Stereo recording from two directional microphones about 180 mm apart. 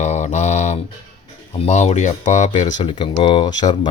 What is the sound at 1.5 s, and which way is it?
Speech, 35° left (ahead or behind).